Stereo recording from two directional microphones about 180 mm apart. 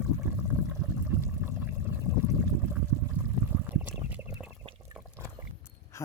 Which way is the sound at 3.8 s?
10° right (ahead or behind).